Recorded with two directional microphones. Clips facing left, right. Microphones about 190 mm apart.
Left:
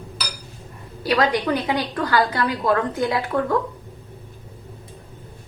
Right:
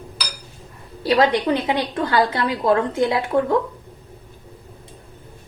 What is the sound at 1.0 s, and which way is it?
A woman's voice, 25° right (ahead or behind).